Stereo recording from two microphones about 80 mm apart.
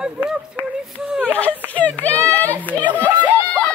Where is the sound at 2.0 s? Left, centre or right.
Centre.